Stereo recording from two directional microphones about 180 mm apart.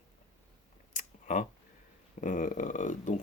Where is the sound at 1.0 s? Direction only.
45° left (ahead or behind).